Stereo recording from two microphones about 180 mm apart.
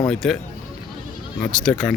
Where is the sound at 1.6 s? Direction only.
5° left (ahead or behind).